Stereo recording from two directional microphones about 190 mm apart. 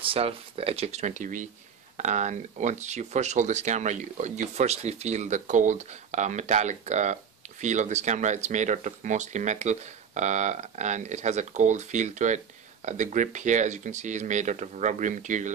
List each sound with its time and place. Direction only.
0.0 s speech: 30° right (ahead or behind)